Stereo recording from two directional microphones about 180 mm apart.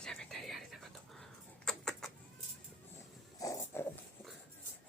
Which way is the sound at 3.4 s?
15° left (ahead or behind).